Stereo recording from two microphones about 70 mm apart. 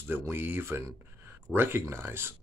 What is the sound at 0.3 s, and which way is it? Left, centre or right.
Speech, right.